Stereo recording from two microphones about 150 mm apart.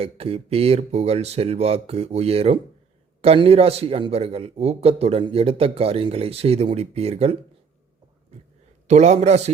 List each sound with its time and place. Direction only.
0.0 s a man's voice: 40° right (ahead or behind)
8.3 s a sound: 45° right (ahead or behind)
8.9 s speech: 50° right (ahead or behind)